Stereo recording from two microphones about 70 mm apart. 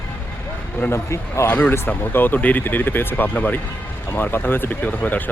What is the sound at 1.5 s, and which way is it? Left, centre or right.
Speech, centre.